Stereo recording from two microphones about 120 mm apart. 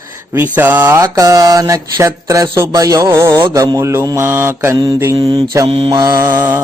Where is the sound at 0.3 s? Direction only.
15° right (ahead or behind).